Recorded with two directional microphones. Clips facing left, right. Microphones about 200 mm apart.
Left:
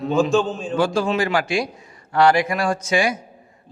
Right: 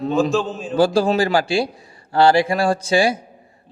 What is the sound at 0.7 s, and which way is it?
A man's voice, 35° right (ahead or behind).